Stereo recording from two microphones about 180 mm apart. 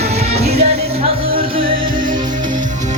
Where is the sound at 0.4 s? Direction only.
35° right (ahead or behind).